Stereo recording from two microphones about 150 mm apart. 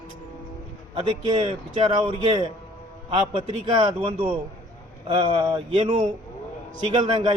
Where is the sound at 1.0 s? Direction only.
30° right (ahead or behind).